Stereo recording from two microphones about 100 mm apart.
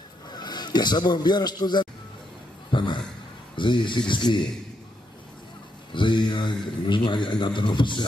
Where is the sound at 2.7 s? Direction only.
55° left (ahead or behind).